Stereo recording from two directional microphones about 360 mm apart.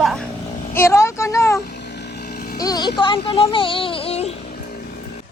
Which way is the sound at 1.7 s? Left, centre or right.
Left.